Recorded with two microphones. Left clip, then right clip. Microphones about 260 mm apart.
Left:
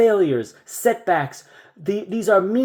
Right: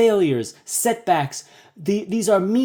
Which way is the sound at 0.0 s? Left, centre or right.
Right.